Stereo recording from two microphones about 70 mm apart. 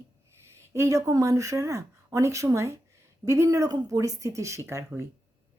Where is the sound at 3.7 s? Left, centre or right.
Right.